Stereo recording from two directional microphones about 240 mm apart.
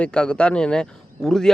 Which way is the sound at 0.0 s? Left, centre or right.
Centre.